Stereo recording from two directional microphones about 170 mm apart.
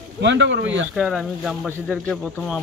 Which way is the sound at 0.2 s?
90° right.